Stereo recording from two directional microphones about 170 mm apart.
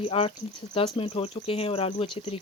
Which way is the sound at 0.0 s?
35° left (ahead or behind).